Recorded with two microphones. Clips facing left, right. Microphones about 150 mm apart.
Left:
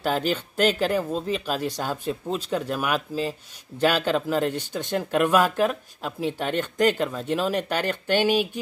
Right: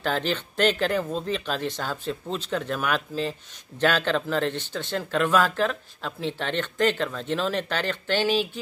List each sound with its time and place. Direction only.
0.0 s speech: 10° left (ahead or behind)